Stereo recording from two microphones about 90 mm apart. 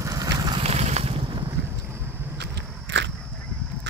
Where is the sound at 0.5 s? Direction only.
90° right.